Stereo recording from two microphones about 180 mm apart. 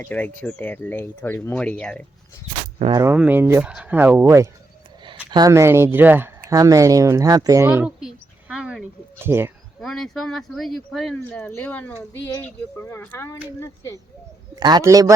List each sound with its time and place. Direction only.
0.0 s speech: 10° left (ahead or behind)
2.9 s speech: 15° right (ahead or behind)
9.8 s speech: centre (ahead or behind)
14.5 s a man's voice: 20° right (ahead or behind)